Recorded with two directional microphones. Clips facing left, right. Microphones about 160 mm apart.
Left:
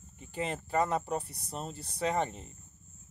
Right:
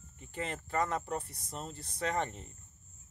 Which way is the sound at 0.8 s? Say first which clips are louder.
Left 3 dB; 10° left (ahead or behind).